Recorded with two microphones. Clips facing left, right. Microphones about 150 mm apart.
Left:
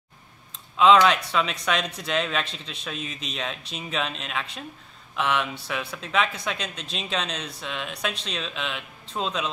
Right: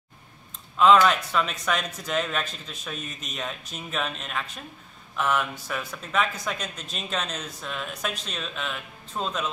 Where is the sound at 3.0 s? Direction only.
90° left.